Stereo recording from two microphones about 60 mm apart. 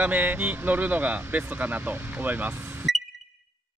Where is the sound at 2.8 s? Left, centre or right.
Centre.